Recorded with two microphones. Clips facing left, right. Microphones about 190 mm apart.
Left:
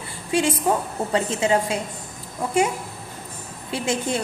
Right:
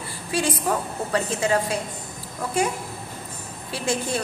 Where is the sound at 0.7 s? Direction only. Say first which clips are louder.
Left 3 dB; 20° left (ahead or behind).